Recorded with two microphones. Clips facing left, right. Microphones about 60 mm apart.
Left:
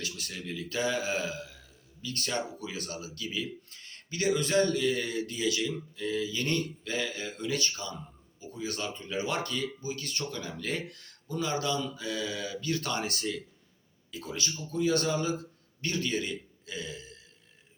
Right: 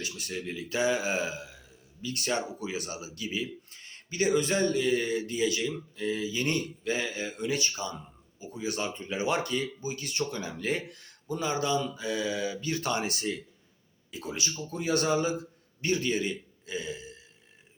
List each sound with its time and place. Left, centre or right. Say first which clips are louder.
0.0 s speech: right 3 dB; centre
14.7 s a man's voice: even; right; by 17.2 s centre